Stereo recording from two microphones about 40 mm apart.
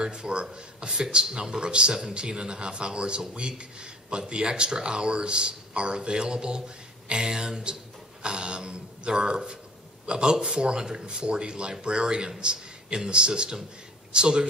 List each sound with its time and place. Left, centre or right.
0.0 s a man's voice: right